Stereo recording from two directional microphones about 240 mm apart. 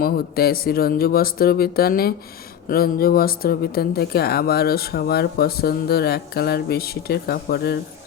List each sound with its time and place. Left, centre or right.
0.0 s speech: left